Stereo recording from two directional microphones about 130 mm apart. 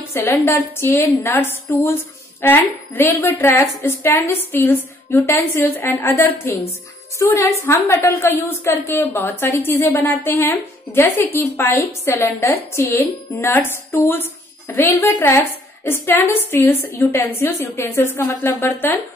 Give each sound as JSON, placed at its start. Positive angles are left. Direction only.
{"t": 0.1, "sound": "a woman's voice", "side_deg": 20}